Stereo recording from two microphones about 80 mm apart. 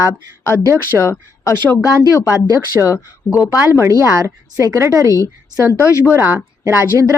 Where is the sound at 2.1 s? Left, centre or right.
Left.